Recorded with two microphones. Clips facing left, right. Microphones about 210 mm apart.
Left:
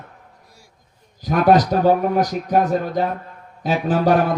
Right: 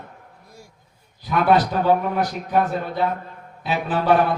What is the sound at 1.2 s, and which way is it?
A man's voice, 40° left (ahead or behind).